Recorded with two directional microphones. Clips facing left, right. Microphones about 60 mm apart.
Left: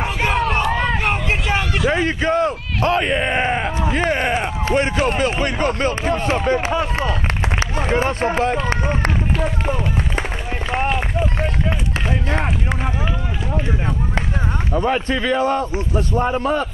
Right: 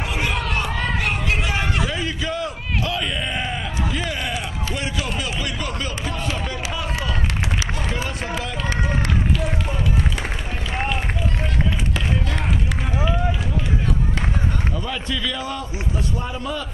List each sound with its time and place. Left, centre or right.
0.0 s a sound: left
1.9 s a man's voice: left
10.7 s run: left
14.7 s a man's voice: left